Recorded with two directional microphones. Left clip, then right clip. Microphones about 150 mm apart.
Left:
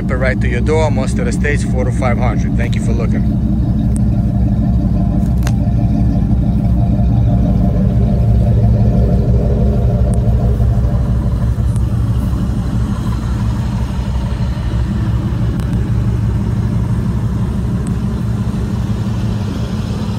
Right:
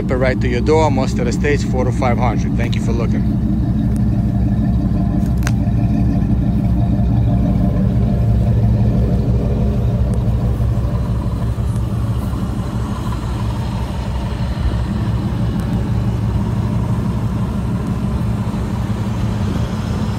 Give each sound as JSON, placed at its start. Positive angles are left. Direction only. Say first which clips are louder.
{"t": 0.1, "sound": "speech", "louder": "even", "side_deg": -30}